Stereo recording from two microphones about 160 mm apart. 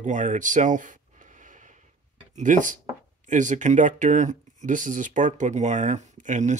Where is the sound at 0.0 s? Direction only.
50° right (ahead or behind).